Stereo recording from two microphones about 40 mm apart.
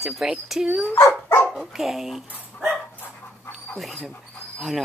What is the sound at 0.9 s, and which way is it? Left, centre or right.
Speech, left.